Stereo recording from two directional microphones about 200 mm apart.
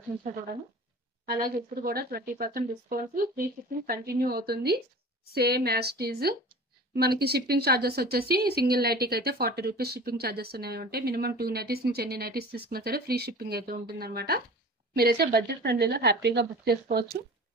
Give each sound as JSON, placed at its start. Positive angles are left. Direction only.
{"t": 1.2, "sound": "speech", "side_deg": -50}